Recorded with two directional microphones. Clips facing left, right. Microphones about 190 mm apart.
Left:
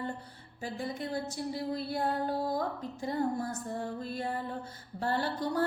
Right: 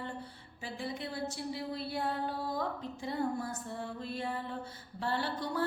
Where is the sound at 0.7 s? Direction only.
45° left (ahead or behind).